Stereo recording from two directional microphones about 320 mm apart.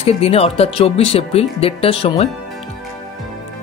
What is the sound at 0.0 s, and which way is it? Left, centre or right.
Speech, centre.